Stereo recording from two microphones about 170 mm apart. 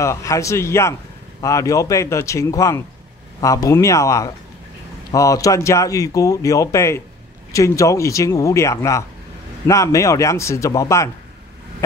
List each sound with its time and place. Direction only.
0.0 s speech: 20° left (ahead or behind)